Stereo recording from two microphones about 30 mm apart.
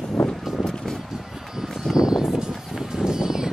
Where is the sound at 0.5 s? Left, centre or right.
Centre.